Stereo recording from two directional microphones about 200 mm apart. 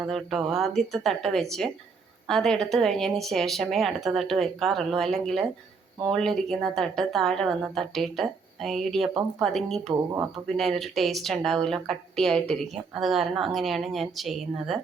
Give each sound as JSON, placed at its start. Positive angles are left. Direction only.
{"t": 0.0, "sound": "speech", "side_deg": 0}
{"t": 9.9, "sound": "speech", "side_deg": -20}
{"t": 10.6, "sound": "speech", "side_deg": 0}